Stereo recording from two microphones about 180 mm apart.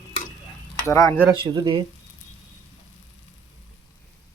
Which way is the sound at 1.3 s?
25° right (ahead or behind).